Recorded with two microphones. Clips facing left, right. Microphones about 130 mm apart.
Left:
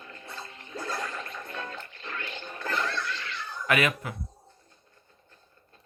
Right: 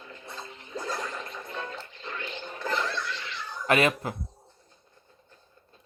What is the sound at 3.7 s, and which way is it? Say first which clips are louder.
Speech: right 3 dB; 30° right (ahead or behind).